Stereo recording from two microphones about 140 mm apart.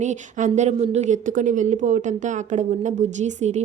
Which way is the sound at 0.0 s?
60° right (ahead or behind).